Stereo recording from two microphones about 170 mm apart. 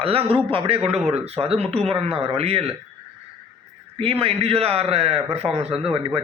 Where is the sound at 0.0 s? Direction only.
35° right (ahead or behind).